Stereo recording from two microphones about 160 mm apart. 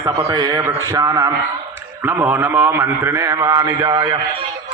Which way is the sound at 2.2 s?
15° right (ahead or behind).